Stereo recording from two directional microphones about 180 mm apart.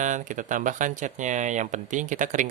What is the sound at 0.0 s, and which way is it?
Speech, 45° right (ahead or behind).